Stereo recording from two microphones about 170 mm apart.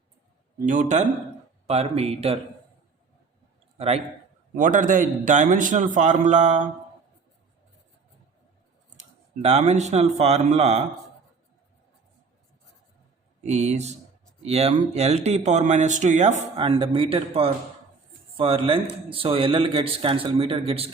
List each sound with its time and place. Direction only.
0.6 s a man's voice: 50° right (ahead or behind)
3.8 s a man's voice: 40° right (ahead or behind)
4.5 s a man's voice: 50° right (ahead or behind)
9.4 s speech: 40° right (ahead or behind)
13.4 s speech: 40° right (ahead or behind)